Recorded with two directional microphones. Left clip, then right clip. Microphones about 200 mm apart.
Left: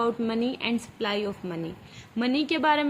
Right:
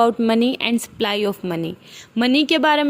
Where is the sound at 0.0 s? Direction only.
45° right (ahead or behind).